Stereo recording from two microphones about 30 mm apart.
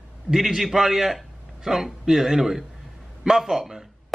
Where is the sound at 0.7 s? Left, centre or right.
Centre.